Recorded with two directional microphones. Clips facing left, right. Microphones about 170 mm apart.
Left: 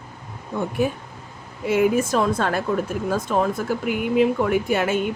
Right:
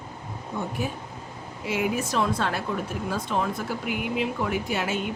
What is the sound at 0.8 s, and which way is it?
Speech, 60° left (ahead or behind).